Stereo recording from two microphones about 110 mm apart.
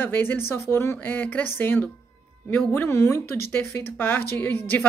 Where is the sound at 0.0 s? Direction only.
15° left (ahead or behind).